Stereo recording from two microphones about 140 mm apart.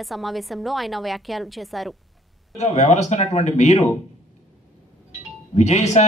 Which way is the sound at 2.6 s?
55° left (ahead or behind).